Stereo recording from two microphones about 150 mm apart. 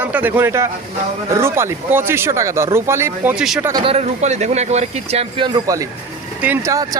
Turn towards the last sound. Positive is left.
turn(degrees=-10)  # may be behind; listen again after turning